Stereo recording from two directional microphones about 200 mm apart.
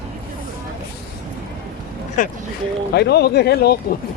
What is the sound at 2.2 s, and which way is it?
Speech, 40° left (ahead or behind).